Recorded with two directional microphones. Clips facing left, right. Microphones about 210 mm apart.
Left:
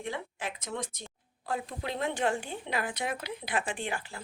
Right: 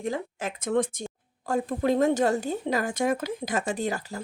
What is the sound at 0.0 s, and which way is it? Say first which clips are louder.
Speech: right 6 dB; 45° right (ahead or behind).